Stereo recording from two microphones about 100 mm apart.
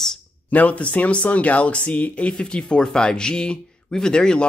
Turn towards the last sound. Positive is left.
turn(degrees=5)  # may be behind; listen again after turning